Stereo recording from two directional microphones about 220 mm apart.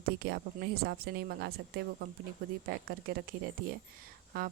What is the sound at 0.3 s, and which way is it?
A woman's voice, 45° right (ahead or behind).